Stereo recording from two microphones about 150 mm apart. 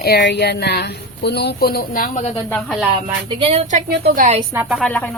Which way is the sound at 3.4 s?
45° right (ahead or behind).